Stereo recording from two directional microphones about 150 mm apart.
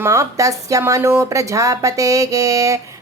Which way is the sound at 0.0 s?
20° right (ahead or behind).